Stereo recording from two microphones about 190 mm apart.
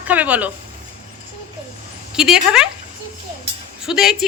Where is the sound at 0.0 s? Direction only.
10° right (ahead or behind).